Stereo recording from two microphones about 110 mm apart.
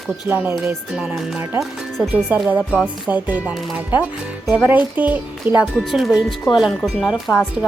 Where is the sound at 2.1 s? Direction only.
15° right (ahead or behind).